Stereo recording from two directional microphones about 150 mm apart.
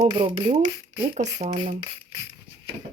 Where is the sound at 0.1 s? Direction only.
35° right (ahead or behind).